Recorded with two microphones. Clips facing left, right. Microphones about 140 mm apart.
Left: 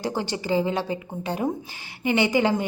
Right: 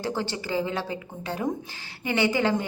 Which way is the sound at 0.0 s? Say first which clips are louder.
Left 2 dB; 15° left (ahead or behind).